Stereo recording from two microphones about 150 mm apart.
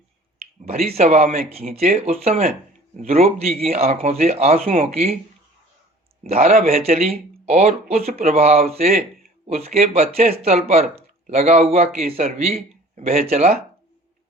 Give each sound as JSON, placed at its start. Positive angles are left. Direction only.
{"t": 0.3, "sound": "finger snapping", "side_deg": -45}
{"t": 1.0, "sound": "speech", "side_deg": -50}
{"t": 6.2, "sound": "speech", "side_deg": -45}
{"t": 6.8, "sound": "speech", "side_deg": -45}